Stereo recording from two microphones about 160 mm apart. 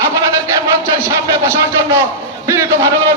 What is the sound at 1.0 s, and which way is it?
A man's voice, 20° right (ahead or behind).